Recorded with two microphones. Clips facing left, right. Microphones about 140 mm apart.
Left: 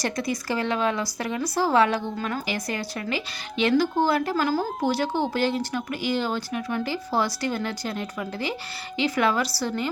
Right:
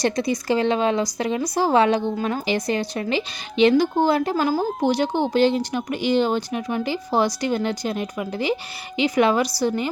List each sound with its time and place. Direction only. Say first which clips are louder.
0.0 s a woman's voice: right 5 dB; 20° right (ahead or behind)